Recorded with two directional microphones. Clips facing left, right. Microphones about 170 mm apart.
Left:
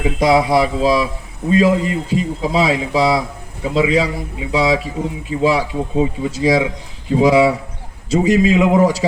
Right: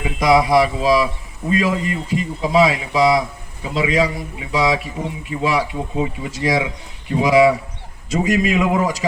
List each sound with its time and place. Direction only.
0.2 s speech: 25° left (ahead or behind)